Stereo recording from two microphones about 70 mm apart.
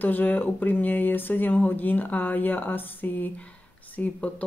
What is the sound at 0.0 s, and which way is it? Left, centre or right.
Speech, left.